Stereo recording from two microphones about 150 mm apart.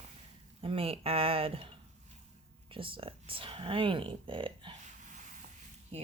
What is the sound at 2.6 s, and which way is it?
Speech, 35° right (ahead or behind).